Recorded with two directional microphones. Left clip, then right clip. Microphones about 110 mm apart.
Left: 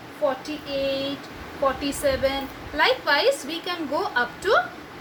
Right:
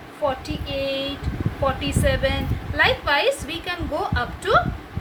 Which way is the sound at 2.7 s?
30° left (ahead or behind).